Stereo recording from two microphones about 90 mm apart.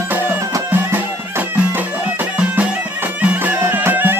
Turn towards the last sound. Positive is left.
turn(degrees=-20)  # may be behind; listen again after turning